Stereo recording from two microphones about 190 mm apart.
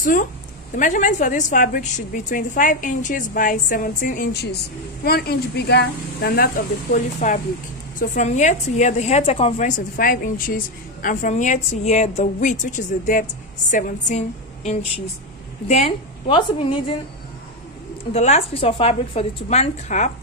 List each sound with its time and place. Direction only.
0.7 s a woman's voice: 40° left (ahead or behind)
18.1 s a woman's voice: 35° left (ahead or behind)